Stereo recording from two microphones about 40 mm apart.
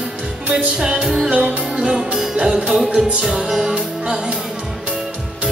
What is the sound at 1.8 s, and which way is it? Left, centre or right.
Music, right.